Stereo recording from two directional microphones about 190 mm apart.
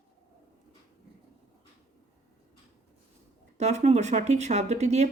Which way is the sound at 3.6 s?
35° right (ahead or behind).